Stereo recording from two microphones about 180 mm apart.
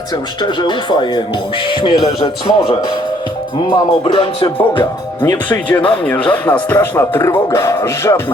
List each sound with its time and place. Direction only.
0.4 s speech: 25° left (ahead or behind)
5.5 s speech: 10° left (ahead or behind)